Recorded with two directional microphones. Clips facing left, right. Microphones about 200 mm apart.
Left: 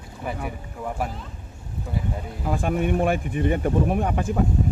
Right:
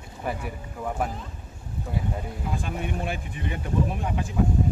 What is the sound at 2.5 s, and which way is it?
Speech, 55° left (ahead or behind).